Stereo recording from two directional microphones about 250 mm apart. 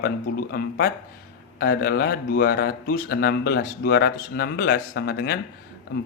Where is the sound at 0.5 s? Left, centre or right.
Left.